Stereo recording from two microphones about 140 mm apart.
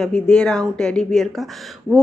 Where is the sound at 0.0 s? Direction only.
5° left (ahead or behind).